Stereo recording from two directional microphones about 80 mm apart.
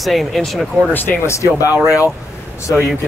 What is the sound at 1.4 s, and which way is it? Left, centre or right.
Speech, left.